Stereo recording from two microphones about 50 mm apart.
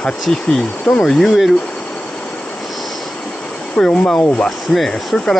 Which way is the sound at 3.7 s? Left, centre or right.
Centre.